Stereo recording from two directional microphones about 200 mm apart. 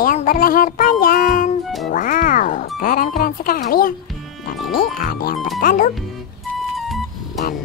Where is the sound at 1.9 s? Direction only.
40° left (ahead or behind).